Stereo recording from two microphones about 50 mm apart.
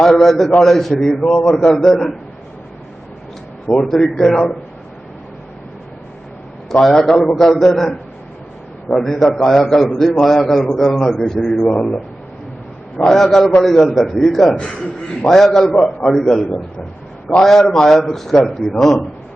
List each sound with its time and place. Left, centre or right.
0.0 s a man's voice: centre
3.7 s a man's voice: centre
6.8 s a man's voice: centre
11.6 s a man's voice: centre
13.0 s a man's voice: centre
17.4 s a man's voice: centre